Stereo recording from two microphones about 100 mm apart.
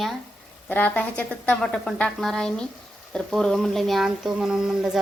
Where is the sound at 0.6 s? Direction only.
15° left (ahead or behind).